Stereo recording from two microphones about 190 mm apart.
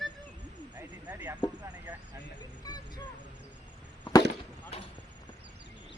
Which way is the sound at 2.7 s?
20° left (ahead or behind).